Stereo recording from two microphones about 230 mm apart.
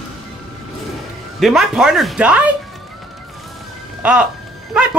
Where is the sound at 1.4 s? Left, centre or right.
Centre.